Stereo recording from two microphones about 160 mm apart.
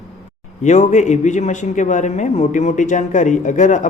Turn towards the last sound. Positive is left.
turn(degrees=50)  # may be behind; listen again after turning